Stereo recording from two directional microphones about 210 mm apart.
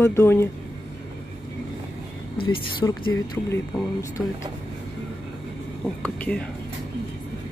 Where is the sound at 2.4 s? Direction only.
20° left (ahead or behind).